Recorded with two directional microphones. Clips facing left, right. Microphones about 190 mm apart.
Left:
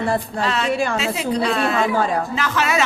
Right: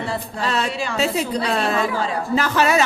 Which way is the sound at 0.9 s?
35° right (ahead or behind).